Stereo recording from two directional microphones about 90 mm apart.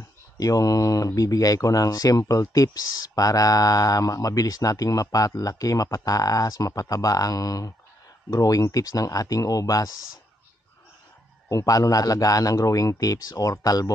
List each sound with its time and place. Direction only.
0.4 s speech: 40° left (ahead or behind)
11.4 s speech: 40° left (ahead or behind)